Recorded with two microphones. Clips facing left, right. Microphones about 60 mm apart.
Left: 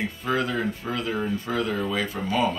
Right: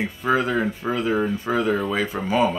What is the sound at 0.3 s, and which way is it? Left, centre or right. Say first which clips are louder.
A man's voice: right 5 dB; right.